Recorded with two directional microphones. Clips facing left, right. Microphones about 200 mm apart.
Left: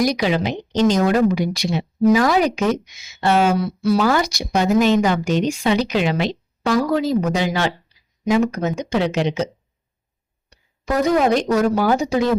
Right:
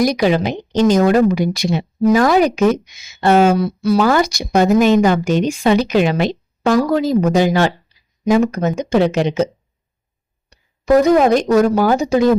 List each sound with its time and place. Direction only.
0.0 s speech: 50° right (ahead or behind)
10.5 s a sound: 45° right (ahead or behind)
11.5 s speech: 45° right (ahead or behind)